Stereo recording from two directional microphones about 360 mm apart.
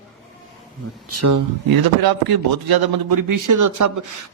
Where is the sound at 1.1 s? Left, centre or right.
Right.